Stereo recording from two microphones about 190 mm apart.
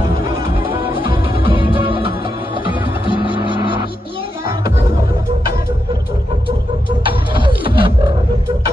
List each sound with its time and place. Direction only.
0.7 s music: 25° right (ahead or behind)
7.1 s music: 25° right (ahead or behind)